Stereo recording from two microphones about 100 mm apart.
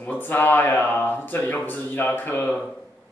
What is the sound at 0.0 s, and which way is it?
Speech, 20° left (ahead or behind).